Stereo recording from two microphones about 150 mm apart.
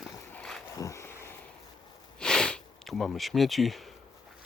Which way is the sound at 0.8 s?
20° left (ahead or behind).